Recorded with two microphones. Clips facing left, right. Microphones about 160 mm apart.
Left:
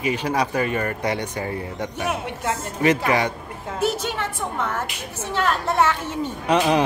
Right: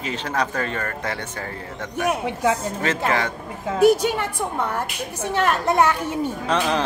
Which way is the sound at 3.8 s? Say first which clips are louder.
Right 8 dB; 10° right (ahead or behind).